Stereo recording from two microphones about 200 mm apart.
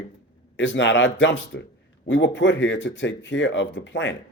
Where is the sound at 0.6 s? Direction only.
65° left (ahead or behind).